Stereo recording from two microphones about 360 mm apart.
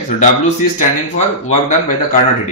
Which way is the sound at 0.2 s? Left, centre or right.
Left.